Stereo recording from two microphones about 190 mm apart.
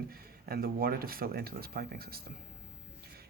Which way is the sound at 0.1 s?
50° right (ahead or behind).